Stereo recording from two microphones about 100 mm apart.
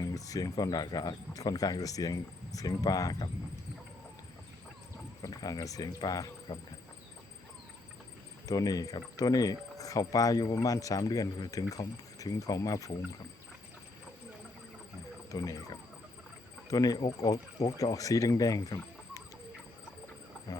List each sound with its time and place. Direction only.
0.0 s speech: 35° left (ahead or behind)
5.2 s speech: 35° left (ahead or behind)
8.4 s speech: 35° left (ahead or behind)
15.3 s speech: 35° left (ahead or behind)